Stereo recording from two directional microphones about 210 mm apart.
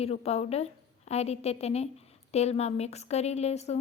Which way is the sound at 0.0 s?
30° left (ahead or behind).